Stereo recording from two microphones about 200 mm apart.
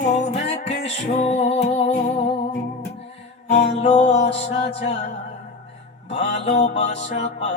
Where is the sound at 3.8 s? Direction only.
30° left (ahead or behind).